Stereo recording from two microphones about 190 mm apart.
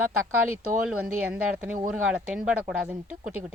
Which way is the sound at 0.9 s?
5° right (ahead or behind).